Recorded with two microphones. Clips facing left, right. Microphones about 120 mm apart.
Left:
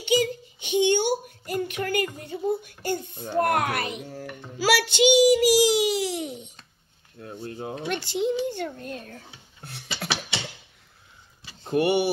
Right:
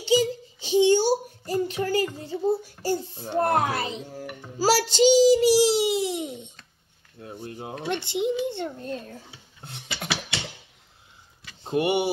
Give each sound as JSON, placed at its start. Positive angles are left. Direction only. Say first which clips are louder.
{"t": 0.0, "sound": "child singing", "louder": "right 1 dB", "side_deg": -30}
{"t": 3.3, "sound": "a child's voice", "louder": "even", "side_deg": -25}
{"t": 4.6, "sound": "a child's voice", "louder": "right 1 dB", "side_deg": -35}
{"t": 7.4, "sound": "a child's voice", "louder": "even", "side_deg": -20}
{"t": 11.6, "sound": "a child's voice", "louder": "left 1 dB", "side_deg": -20}